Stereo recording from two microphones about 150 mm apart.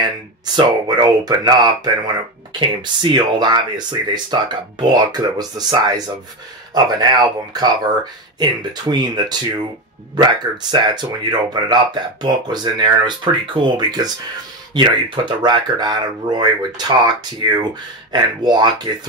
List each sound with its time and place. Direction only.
0.6 s speech: 25° right (ahead or behind)